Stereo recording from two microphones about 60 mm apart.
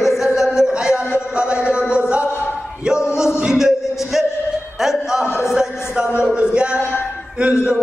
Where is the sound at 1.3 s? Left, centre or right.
Centre.